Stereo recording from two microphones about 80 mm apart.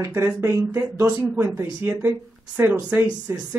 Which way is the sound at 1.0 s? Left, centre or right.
Right.